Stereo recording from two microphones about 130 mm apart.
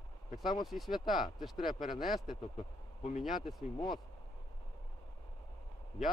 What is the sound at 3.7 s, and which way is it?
Speech, 35° left (ahead or behind).